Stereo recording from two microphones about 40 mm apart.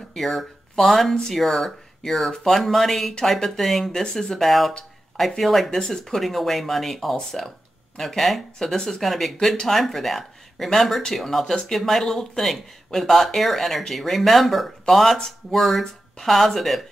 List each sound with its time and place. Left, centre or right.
0.1 s speech: centre
4.0 s speech: centre
4.4 s speech: centre
5.7 s speech: centre